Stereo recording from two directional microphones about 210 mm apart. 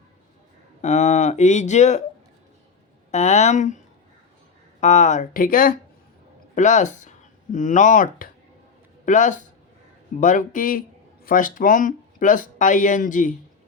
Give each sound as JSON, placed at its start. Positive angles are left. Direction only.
{"t": 0.8, "sound": "speech", "side_deg": 35}
{"t": 3.1, "sound": "speech", "side_deg": 35}
{"t": 4.8, "sound": "speech", "side_deg": 35}